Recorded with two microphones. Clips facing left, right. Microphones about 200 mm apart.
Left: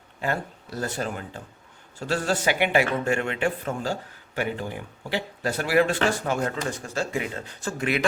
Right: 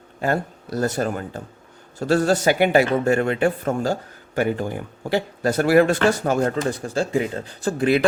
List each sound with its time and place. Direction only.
0.2 s speech: 45° right (ahead or behind)